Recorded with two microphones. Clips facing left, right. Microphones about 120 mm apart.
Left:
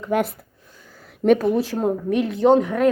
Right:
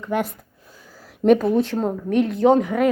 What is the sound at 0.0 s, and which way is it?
Speech, 5° left (ahead or behind).